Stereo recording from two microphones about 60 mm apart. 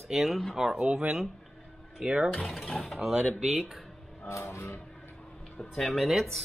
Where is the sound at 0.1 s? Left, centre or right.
Centre.